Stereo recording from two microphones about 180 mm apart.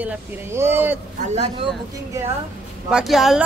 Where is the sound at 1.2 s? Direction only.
35° right (ahead or behind).